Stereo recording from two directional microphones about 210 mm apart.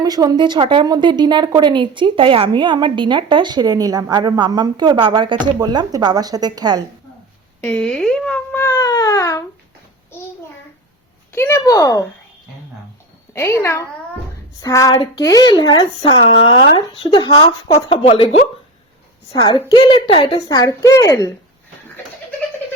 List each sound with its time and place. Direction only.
0.0 s a woman's voice: 20° right (ahead or behind)
7.6 s speech: 5° left (ahead or behind)
11.3 s a child's voice: 10° left (ahead or behind)
13.3 s a child's voice: 10° left (ahead or behind)